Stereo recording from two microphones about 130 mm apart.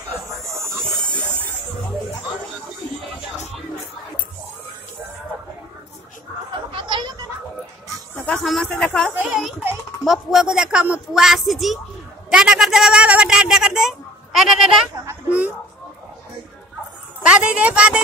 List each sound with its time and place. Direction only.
6.7 s a sound: 35° right (ahead or behind)
8.3 s speech: centre (ahead or behind)
9.1 s speech: 15° right (ahead or behind)
10.0 s a man's voice: centre (ahead or behind)
15.0 s a sound: 10° right (ahead or behind)
17.3 s speech: 10° right (ahead or behind)